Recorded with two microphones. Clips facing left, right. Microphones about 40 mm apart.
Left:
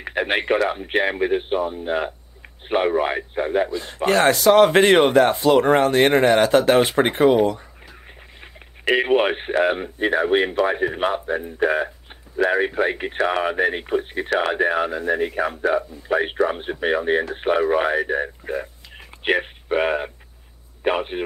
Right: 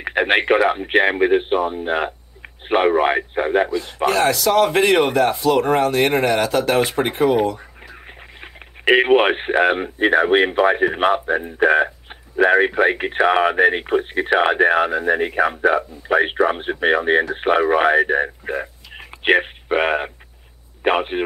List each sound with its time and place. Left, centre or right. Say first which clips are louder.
0.0 s speech: right 5 dB; right
4.0 s speech: left 1 dB; left
4.5 s speech: left 4 dB; left
4.7 s speech: left 2 dB; left
7.9 s speech: right 5 dB; right